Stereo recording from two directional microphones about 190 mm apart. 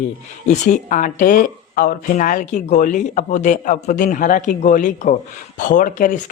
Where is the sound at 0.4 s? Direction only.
40° left (ahead or behind).